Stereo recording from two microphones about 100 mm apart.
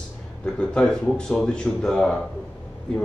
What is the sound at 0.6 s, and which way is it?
Speech, 10° left (ahead or behind).